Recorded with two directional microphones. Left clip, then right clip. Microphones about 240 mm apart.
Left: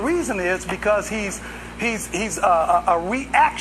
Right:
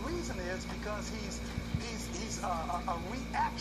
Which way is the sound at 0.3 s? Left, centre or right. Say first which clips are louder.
Left 17 dB; left.